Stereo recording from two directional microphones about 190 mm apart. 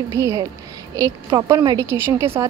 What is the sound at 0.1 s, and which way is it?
A woman's voice, 15° right (ahead or behind).